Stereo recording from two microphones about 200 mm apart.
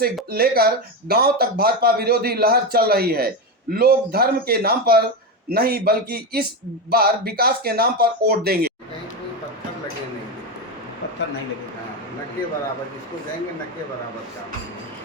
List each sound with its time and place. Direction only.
0.3 s speech: 50° right (ahead or behind)